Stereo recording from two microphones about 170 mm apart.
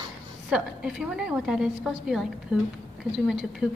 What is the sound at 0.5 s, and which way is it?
A woman's voice, 5° right (ahead or behind).